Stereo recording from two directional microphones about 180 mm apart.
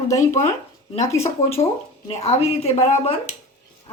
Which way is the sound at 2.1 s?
35° left (ahead or behind).